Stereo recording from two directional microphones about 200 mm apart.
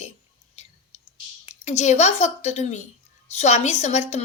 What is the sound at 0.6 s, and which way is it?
Whispering, 35° left (ahead or behind).